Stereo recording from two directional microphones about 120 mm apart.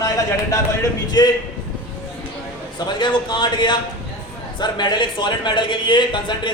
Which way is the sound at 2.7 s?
40° left (ahead or behind).